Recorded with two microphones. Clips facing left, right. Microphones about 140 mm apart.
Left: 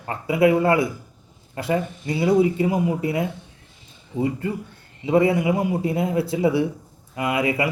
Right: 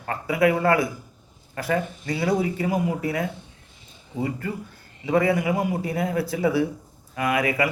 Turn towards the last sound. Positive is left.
turn(degrees=25)  # may be behind; listen again after turning